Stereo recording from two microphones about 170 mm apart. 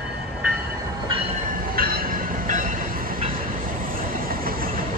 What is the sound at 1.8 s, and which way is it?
Train, 60° right (ahead or behind).